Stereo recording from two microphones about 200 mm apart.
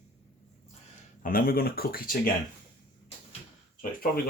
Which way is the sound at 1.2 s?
45° left (ahead or behind).